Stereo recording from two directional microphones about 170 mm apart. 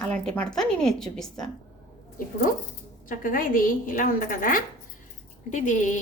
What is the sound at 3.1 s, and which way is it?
A woman's voice, 55° left (ahead or behind).